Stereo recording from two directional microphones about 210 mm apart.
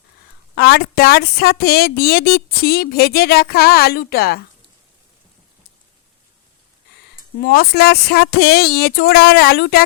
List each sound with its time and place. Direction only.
0.5 s speech: 50° left (ahead or behind)
7.3 s speech: 45° left (ahead or behind)